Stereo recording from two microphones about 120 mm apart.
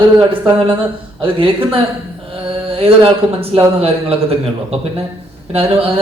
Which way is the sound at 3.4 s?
55° right (ahead or behind).